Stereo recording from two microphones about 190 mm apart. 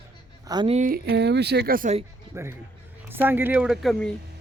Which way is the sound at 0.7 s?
40° right (ahead or behind).